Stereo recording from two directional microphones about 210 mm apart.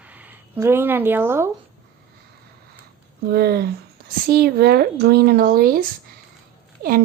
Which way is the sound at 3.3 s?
45° right (ahead or behind).